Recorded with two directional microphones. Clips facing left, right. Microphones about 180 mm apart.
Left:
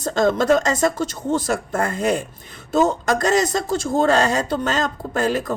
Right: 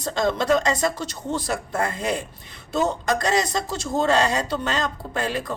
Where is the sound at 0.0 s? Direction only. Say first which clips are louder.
Left 5 dB; 50° left (ahead or behind).